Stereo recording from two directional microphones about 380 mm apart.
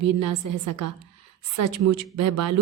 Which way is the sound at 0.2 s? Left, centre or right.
Right.